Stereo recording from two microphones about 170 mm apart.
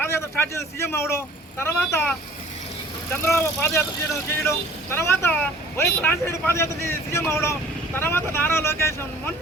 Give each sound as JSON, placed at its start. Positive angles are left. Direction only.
{"t": 0.0, "sound": "speech", "side_deg": 15}